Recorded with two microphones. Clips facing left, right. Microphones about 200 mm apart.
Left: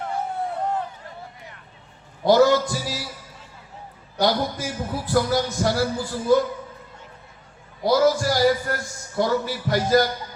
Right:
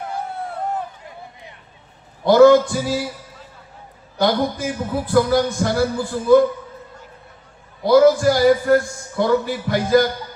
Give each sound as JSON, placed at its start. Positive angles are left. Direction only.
{"t": 1.0, "sound": "a sound", "side_deg": -20}
{"t": 2.2, "sound": "a man's voice", "side_deg": -55}
{"t": 4.2, "sound": "a man's voice", "side_deg": -55}
{"t": 7.9, "sound": "a man's voice", "side_deg": -55}